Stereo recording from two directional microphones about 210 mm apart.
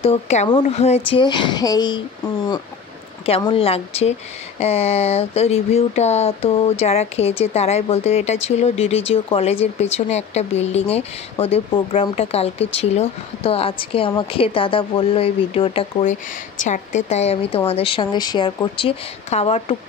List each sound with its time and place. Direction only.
0.0 s speech: 30° left (ahead or behind)